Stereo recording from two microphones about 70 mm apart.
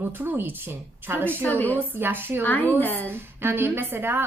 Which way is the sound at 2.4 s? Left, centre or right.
Left.